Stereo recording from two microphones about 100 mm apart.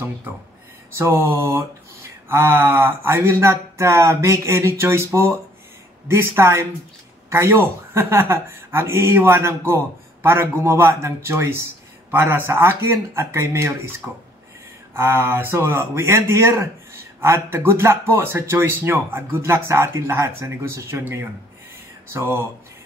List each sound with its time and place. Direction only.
0.9 s speech: 25° right (ahead or behind)